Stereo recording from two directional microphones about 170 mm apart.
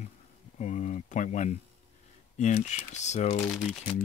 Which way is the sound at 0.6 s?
45° left (ahead or behind).